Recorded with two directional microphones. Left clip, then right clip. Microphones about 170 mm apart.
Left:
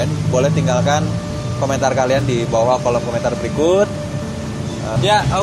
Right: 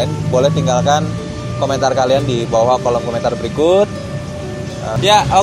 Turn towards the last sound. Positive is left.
turn(degrees=-65)  # may be behind; listen again after turning